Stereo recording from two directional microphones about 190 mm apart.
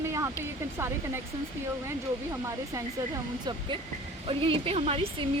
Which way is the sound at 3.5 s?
20° right (ahead or behind).